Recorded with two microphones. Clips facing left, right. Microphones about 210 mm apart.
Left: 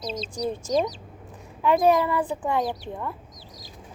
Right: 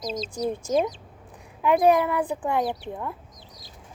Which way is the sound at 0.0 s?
30° left (ahead or behind).